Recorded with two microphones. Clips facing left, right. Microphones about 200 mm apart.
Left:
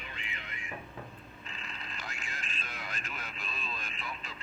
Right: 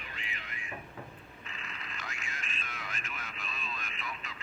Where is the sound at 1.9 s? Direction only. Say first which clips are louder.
Even; 30° left (ahead or behind).